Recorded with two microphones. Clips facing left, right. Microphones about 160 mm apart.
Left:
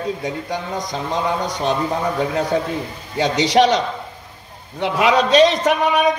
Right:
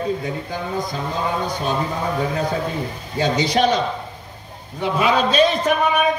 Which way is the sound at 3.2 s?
85° left.